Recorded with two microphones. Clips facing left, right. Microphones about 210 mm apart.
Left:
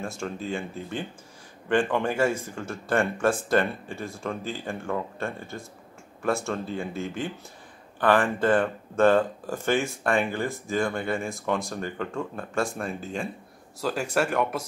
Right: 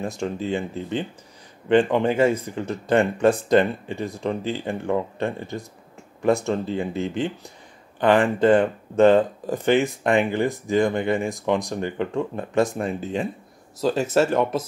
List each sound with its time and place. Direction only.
0.2 s speech: 20° right (ahead or behind)